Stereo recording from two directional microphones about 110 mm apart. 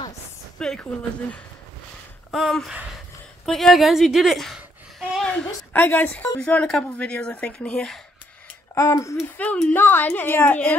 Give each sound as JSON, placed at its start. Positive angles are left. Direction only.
{"t": 0.6, "sound": "speech", "side_deg": 10}
{"t": 2.3, "sound": "a woman's voice", "side_deg": 0}
{"t": 5.1, "sound": "a sound", "side_deg": 5}
{"t": 5.7, "sound": "speech", "side_deg": 20}
{"t": 8.7, "sound": "speech", "side_deg": 30}
{"t": 9.4, "sound": "speech", "side_deg": 15}